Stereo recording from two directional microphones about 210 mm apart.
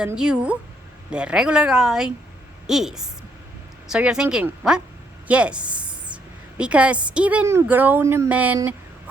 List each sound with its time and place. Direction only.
0.0 s a woman's voice: 5° right (ahead or behind)